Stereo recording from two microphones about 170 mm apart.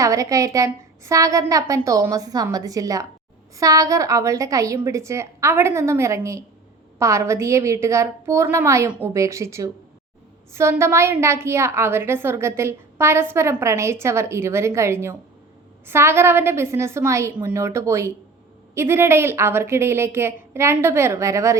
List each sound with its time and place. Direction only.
0.0 s a woman's voice: 20° right (ahead or behind)